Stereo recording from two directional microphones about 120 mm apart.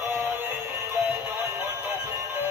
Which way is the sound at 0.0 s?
15° right (ahead or behind).